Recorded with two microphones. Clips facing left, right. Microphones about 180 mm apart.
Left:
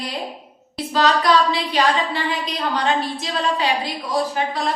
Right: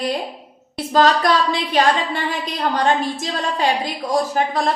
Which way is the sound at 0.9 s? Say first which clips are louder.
Right 2 dB; 50° right (ahead or behind).